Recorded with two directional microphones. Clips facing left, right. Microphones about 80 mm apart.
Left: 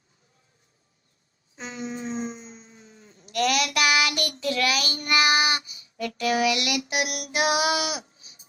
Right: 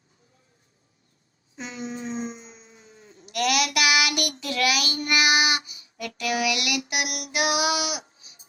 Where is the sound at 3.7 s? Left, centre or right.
Left.